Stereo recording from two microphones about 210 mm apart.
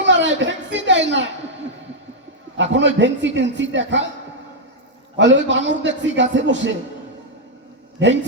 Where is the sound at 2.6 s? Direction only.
60° right (ahead or behind).